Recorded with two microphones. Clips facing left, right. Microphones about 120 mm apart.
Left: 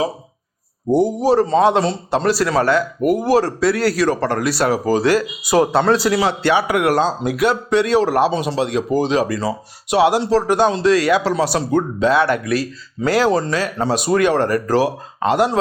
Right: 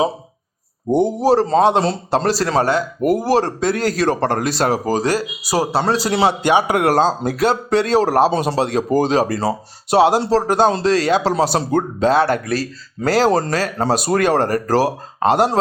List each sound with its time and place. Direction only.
0.9 s a man's voice: 20° right (ahead or behind)
1.2 s speech: 35° right (ahead or behind)
6.4 s a man's voice: 15° right (ahead or behind)
6.7 s speech: 35° right (ahead or behind)
11.7 s speech: 40° right (ahead or behind)